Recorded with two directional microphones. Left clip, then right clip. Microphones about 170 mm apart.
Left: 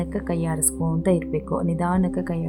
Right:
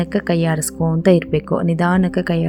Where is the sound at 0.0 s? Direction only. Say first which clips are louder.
Right 8 dB; 30° right (ahead or behind).